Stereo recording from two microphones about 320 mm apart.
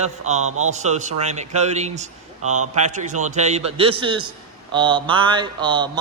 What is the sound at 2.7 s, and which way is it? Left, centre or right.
A man's voice, right.